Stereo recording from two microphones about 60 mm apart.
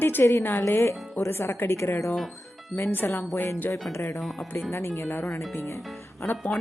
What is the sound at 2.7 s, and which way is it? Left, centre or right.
Speech, left.